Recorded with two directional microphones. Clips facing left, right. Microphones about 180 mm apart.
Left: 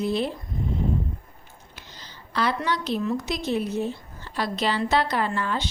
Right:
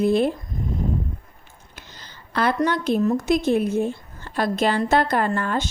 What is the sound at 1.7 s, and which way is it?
A woman's voice, 50° right (ahead or behind).